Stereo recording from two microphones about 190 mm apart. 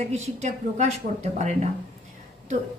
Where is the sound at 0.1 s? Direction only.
35° right (ahead or behind).